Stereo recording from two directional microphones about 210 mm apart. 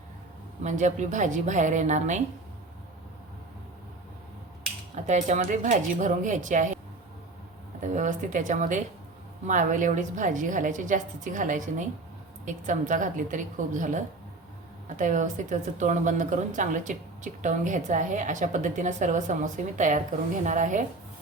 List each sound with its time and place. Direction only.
0.6 s speech: 35° right (ahead or behind)
5.0 s speech: 35° right (ahead or behind)
7.8 s speech: 35° right (ahead or behind)